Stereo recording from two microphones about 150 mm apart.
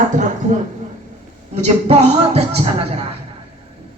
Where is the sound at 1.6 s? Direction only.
50° right (ahead or behind).